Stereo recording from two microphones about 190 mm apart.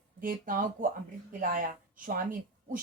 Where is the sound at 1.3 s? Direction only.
45° right (ahead or behind).